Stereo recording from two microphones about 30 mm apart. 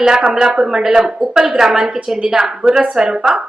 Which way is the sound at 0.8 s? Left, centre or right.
Centre.